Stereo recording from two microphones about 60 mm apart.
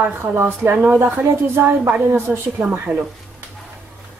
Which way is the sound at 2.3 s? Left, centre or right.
Centre.